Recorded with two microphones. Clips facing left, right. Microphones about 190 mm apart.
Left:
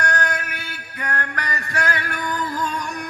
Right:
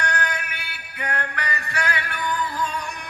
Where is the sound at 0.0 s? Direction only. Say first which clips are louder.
Left 3 dB; 45° left (ahead or behind).